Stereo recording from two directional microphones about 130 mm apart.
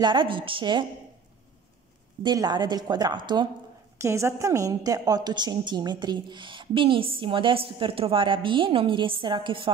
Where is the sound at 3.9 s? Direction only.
20° right (ahead or behind).